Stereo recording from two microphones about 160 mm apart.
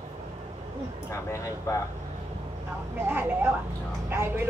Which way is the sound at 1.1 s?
20° left (ahead or behind).